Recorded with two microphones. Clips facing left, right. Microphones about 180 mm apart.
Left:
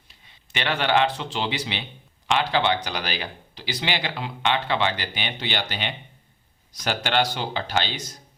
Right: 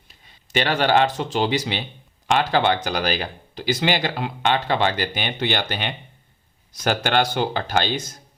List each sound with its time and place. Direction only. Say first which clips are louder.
0.1 s speech: right 10 dB; 40° right (ahead or behind)